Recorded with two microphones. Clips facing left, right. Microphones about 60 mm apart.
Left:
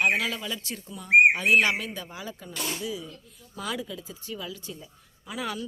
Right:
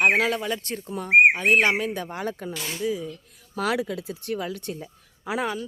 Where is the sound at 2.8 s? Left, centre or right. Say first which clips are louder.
Right 7 dB; right.